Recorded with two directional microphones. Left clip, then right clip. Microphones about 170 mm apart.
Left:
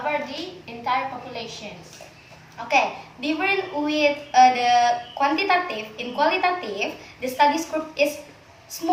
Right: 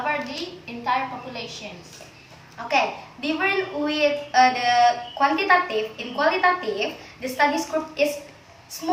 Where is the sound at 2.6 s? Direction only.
25° left (ahead or behind).